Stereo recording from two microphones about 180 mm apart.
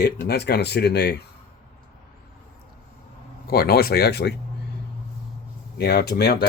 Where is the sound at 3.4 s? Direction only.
60° left (ahead or behind).